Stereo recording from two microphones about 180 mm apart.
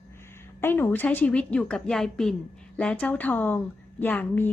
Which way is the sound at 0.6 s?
10° left (ahead or behind).